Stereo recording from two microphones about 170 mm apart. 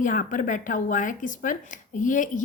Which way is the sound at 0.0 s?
50° left (ahead or behind).